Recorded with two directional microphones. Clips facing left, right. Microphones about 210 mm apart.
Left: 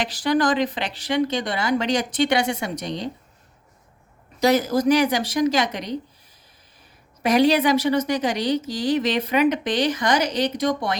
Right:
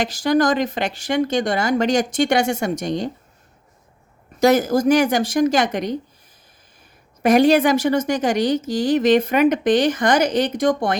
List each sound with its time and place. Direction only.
0.0 s speech: 45° right (ahead or behind)
4.4 s speech: 50° right (ahead or behind)
7.2 s speech: 50° right (ahead or behind)